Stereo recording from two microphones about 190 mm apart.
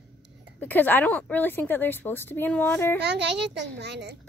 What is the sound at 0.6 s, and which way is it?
A woman's voice, 10° left (ahead or behind).